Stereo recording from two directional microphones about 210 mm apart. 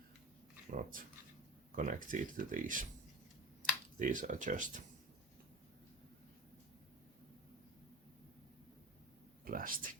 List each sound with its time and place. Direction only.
0.8 s speech: 40° right (ahead or behind)
3.9 s speech: 40° right (ahead or behind)
9.4 s speech: 40° right (ahead or behind)